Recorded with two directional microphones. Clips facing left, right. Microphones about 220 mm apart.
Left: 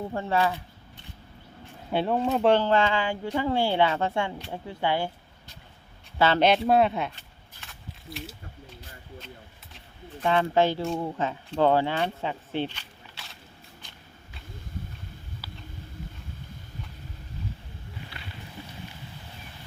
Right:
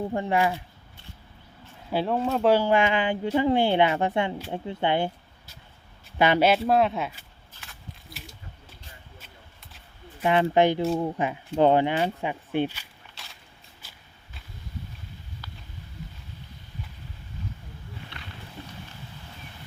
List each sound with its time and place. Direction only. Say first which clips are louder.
0.1 s speech: even; 15° right (ahead or behind)
1.9 s speech: even; centre (ahead or behind); by 5.1 s 20° right (ahead or behind)
6.1 s speech: right 1 dB; 15° right (ahead or behind)
10.2 s speech: right 2 dB; 15° right (ahead or behind)
12.0 s coin: right 2 dB; 10° right (ahead or behind)
13.8 s walk: left 2 dB; 5° right (ahead or behind)
15.4 s a sound: left 1 dB; 5° left (ahead or behind)